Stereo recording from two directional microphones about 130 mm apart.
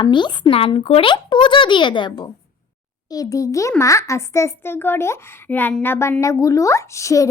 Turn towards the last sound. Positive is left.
turn(degrees=25)  # may be behind; listen again after turning